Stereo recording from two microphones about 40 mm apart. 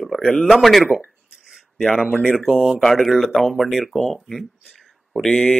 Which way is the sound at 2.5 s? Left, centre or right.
Centre.